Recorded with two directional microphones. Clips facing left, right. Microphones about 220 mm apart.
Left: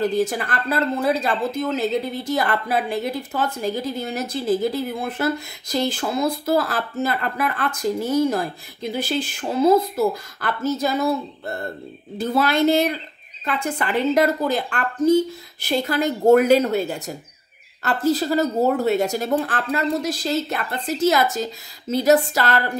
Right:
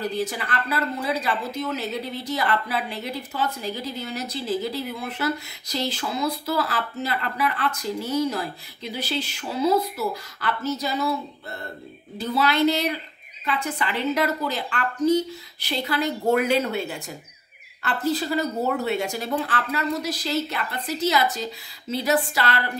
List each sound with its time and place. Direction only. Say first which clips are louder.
0.0 s speech: left 6 dB; 45° left (ahead or behind)